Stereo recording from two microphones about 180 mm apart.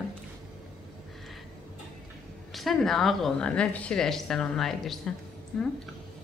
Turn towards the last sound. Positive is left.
turn(degrees=0)  # may be behind; listen again after turning